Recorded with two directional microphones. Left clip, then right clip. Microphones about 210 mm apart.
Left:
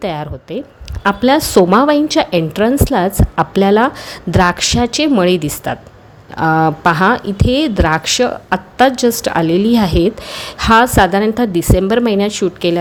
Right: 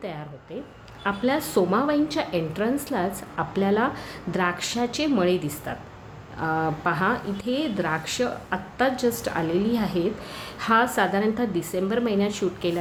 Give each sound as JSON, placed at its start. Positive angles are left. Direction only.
{"t": 0.0, "sound": "speech", "side_deg": 50}